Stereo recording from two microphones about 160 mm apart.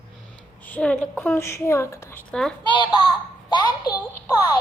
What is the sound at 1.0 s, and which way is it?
A woman's voice, 10° left (ahead or behind).